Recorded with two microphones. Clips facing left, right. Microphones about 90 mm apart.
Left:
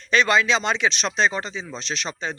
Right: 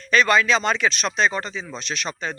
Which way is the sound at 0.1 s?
20° left (ahead or behind).